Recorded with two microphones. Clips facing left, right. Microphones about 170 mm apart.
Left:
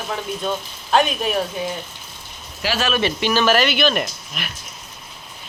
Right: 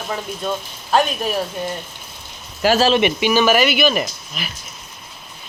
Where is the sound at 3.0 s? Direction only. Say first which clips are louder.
Right 3 dB; 15° right (ahead or behind).